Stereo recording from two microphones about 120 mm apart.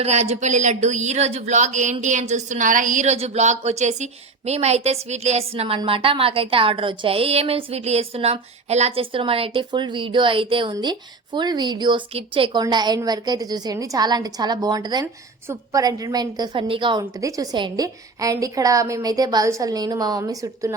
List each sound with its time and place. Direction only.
0.0 s a woman's voice: 65° right (ahead or behind)
9.1 s a woman's voice: 50° right (ahead or behind)
12.6 s a woman's voice: 35° right (ahead or behind)
15.0 s a woman's voice: 20° right (ahead or behind)
15.8 s a woman's voice: 30° right (ahead or behind)
17.0 s a woman's voice: 30° right (ahead or behind)